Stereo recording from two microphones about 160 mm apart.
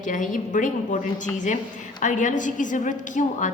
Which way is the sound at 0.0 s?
55° left (ahead or behind).